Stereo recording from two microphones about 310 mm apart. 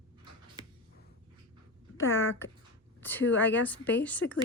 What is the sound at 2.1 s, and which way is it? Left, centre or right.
Speech, centre.